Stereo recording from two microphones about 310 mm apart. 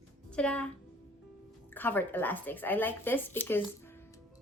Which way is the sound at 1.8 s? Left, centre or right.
Centre.